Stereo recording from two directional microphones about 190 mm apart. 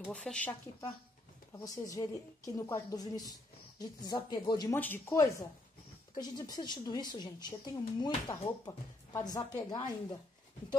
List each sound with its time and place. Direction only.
0.0 s a woman's voice: 5° left (ahead or behind); by 4.7 s 20° left (ahead or behind)
4.7 s a woman's voice: 10° left (ahead or behind)